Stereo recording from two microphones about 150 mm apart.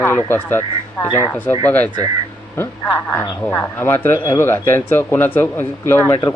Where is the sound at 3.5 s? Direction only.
15° left (ahead or behind).